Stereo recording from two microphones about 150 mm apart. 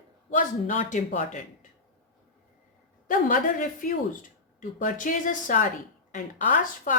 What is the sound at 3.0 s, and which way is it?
A man's voice, 65° left (ahead or behind).